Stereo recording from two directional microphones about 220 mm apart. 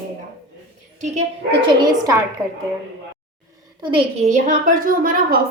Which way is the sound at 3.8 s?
25° right (ahead or behind).